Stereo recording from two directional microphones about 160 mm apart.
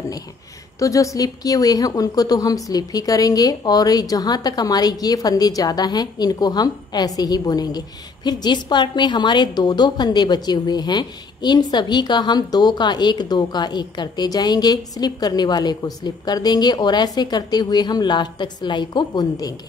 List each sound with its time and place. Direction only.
0.7 s speech: 20° left (ahead or behind)